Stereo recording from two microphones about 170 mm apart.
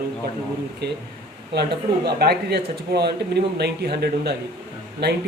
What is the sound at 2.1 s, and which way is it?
Speech, 70° right (ahead or behind).